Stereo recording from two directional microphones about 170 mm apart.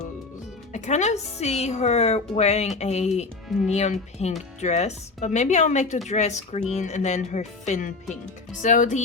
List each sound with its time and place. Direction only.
0.7 s a woman's voice: 45° left (ahead or behind)